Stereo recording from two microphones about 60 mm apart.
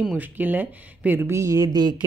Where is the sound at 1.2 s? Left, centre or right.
Right.